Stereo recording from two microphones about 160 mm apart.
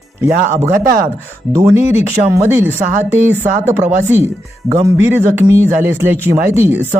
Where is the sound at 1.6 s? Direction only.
15° right (ahead or behind).